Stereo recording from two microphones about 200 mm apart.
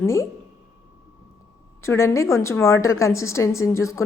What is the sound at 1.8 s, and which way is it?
A woman's voice, 15° left (ahead or behind).